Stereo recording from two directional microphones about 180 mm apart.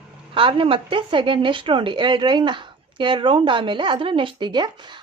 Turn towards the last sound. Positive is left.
turn(degrees=-25)  # may be behind; listen again after turning